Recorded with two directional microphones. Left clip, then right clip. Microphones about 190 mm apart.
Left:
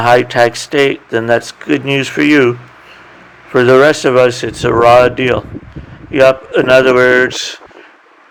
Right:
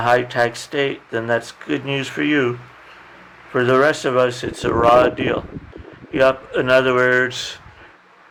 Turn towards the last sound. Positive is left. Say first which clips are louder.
# left 7 dB
turn(degrees=25)  # may be behind; listen again after turning